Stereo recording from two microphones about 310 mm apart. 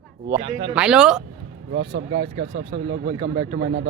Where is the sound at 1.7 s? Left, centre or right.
Right.